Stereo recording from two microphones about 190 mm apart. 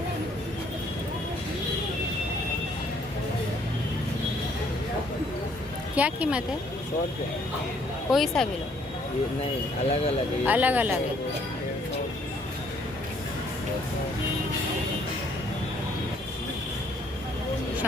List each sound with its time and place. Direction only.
6.0 s speech: 5° right (ahead or behind)
8.1 s speech: centre (ahead or behind)
9.9 s speech: 35° left (ahead or behind)
10.4 s speech: 10° right (ahead or behind)